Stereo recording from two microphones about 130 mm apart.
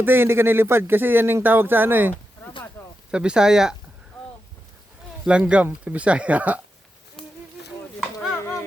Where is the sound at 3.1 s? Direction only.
5° right (ahead or behind).